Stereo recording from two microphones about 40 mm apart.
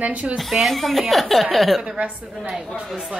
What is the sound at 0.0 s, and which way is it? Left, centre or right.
Speech, right.